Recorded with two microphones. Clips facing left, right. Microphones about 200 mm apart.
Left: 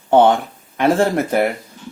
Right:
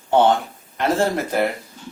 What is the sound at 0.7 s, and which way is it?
Speech, 55° left (ahead or behind).